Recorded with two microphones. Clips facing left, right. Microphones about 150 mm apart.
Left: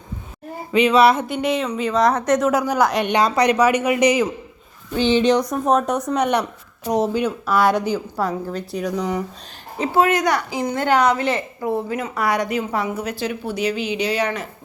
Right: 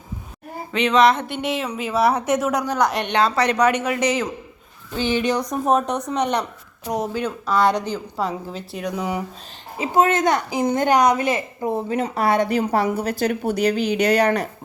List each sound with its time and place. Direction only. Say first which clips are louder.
0.7 s speech: left 2 dB; 10° left (ahead or behind)
4.9 s speech: left 5 dB; 25° left (ahead or behind)
5.8 s speech: left 2 dB; 10° left (ahead or behind)
6.8 s speech: left 4 dB; 20° left (ahead or behind)
7.4 s a woman's voice: even; 5° left (ahead or behind)
9.8 s speech: even; 20° right (ahead or behind)
11.6 s speech: right 1 dB; 25° right (ahead or behind); by 14.3 s 50° right (ahead or behind)